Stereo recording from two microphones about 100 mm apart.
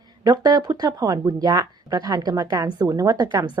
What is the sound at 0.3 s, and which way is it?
Speech, 45° right (ahead or behind).